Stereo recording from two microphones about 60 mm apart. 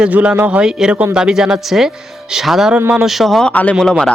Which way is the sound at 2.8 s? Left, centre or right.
Right.